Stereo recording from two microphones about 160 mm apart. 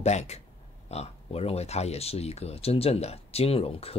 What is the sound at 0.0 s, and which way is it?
Speech, 45° left (ahead or behind).